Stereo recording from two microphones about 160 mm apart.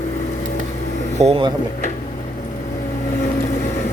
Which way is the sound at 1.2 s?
35° right (ahead or behind).